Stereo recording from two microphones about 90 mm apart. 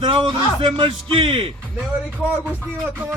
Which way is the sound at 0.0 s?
60° right (ahead or behind).